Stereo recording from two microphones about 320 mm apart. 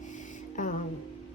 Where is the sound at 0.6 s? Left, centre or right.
Left.